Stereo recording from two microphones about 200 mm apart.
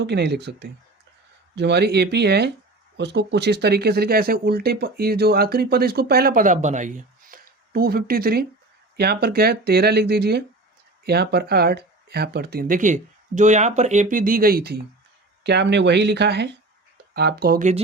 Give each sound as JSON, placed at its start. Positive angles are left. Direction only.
{"t": 0.0, "sound": "speech", "side_deg": -60}